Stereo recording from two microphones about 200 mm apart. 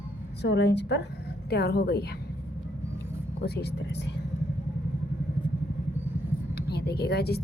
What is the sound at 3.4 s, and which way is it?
Speech, 55° left (ahead or behind).